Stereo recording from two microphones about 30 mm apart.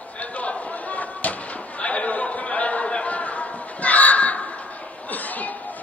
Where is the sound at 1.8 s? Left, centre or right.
Left.